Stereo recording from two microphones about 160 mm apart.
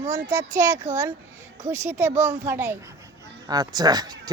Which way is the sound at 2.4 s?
15° right (ahead or behind).